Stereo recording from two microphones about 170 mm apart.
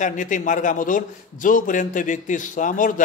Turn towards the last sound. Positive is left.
turn(degrees=50)  # may be behind; listen again after turning